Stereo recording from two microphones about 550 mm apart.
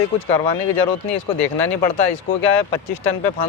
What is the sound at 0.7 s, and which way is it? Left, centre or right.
Speech, left.